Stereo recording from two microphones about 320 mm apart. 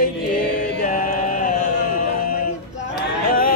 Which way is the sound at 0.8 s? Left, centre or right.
Left.